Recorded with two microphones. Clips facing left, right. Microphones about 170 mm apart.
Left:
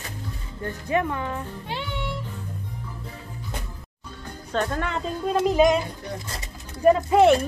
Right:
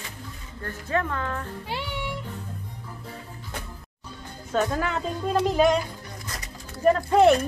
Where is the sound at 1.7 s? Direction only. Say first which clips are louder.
Left 1 dB; 10° right (ahead or behind).